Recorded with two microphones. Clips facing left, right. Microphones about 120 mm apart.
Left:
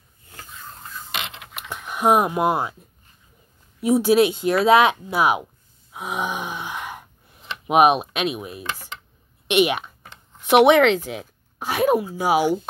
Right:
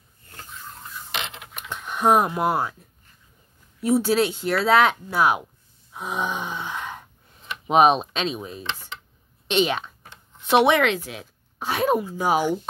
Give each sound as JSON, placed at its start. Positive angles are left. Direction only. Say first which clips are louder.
{"t": 1.7, "sound": "speech", "louder": "left 1 dB", "side_deg": 10}
{"t": 3.8, "sound": "speech", "louder": "left 4 dB", "side_deg": 15}